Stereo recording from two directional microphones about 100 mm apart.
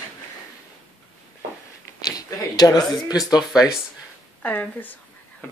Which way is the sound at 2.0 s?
40° left (ahead or behind).